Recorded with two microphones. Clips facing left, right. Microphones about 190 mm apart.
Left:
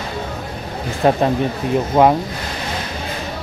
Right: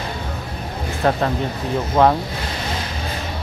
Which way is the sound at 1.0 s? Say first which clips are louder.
Left 4 dB; 20° left (ahead or behind).